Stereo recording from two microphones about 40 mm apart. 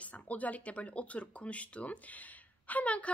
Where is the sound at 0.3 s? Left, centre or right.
Left.